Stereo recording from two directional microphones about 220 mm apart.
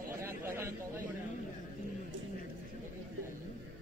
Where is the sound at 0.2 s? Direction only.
10° right (ahead or behind).